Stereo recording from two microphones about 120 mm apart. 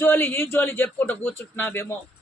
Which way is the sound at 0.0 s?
15° left (ahead or behind).